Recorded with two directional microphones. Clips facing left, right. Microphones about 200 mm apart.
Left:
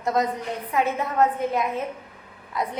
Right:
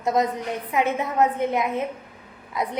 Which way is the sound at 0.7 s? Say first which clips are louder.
Right 1 dB; 20° right (ahead or behind).